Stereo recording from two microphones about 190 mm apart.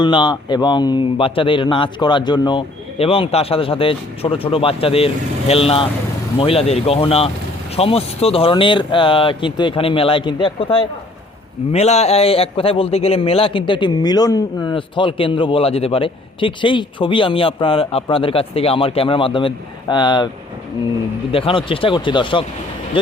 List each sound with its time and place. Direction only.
0.0 s a man's voice: 25° left (ahead or behind)
21.3 s a man's voice: 30° left (ahead or behind)